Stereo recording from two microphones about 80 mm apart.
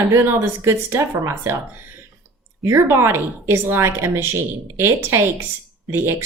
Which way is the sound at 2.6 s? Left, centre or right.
Right.